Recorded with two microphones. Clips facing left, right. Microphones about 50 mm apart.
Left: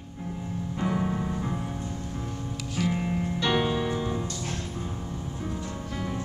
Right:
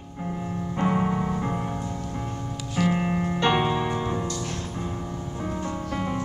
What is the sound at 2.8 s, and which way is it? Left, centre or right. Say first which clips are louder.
Music: right 4 dB; right.